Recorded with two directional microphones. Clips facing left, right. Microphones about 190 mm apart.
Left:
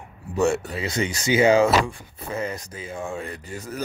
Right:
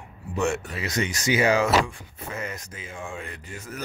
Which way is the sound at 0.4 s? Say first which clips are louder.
Left 4 dB; 30° left (ahead or behind).